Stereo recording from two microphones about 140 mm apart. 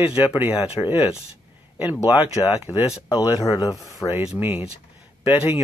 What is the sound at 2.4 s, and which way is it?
Speech, 25° left (ahead or behind).